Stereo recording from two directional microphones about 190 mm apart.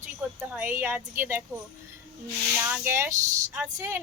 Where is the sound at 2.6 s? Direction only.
10° right (ahead or behind).